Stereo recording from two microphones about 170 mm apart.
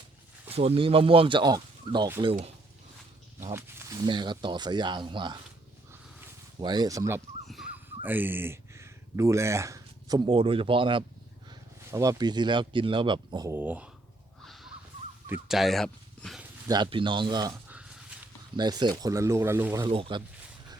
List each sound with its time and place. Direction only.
0.5 s speech: 35° right (ahead or behind)
3.5 s speech: 15° right (ahead or behind)
6.6 s speech: 25° right (ahead or behind)
7.4 s speech: centre (ahead or behind); by 11.0 s 30° right (ahead or behind)
11.9 s speech: 20° right (ahead or behind)
13.6 s speech: 10° right (ahead or behind)
14.4 s snort: centre (ahead or behind)
15.4 s speech: centre (ahead or behind)
16.6 s speech: 25° right (ahead or behind)
17.7 s a sound: 10° right (ahead or behind)
18.5 s speech: 25° right (ahead or behind)
19.8 s speech: 30° right (ahead or behind)